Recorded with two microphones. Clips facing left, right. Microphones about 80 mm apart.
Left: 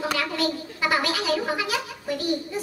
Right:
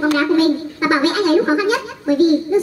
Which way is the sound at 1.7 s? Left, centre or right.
Right.